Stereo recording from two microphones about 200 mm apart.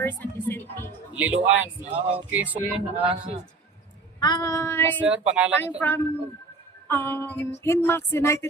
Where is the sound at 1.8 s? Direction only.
25° right (ahead or behind).